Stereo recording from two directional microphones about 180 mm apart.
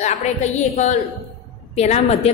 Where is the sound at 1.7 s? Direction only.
35° left (ahead or behind).